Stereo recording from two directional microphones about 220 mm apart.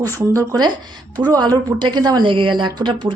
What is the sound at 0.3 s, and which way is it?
A woman's voice, 15° right (ahead or behind).